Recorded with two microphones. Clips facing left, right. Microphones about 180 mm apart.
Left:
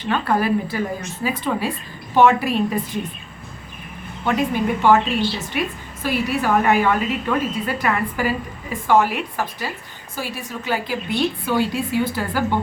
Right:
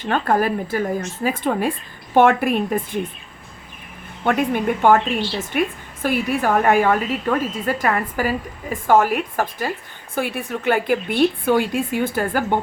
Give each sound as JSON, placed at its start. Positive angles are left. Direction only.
{"t": 0.0, "sound": "a woman's voice", "side_deg": -45}
{"t": 4.2, "sound": "a woman's voice", "side_deg": -55}